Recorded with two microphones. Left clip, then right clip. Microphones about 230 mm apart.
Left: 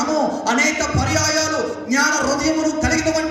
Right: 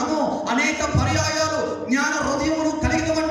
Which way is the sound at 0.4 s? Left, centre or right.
Left.